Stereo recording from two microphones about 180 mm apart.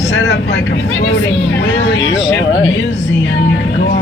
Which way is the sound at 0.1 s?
85° left.